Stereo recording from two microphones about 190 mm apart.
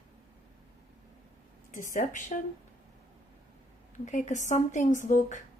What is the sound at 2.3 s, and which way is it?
Speech, 40° left (ahead or behind).